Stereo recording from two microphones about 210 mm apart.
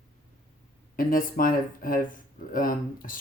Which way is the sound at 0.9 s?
40° left (ahead or behind).